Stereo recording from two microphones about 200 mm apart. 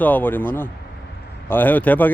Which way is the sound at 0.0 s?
10° left (ahead or behind).